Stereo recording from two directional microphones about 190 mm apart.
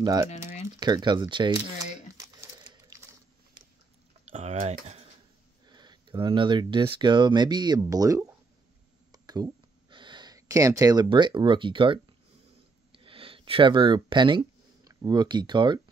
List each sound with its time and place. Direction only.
0.0 s speech: 20° right (ahead or behind)
0.7 s crumpling: 20° right (ahead or behind)
4.3 s typing: 35° right (ahead or behind)
5.7 s speech: 25° right (ahead or behind)
9.1 s a sound: 20° right (ahead or behind)
12.9 s speech: 30° right (ahead or behind)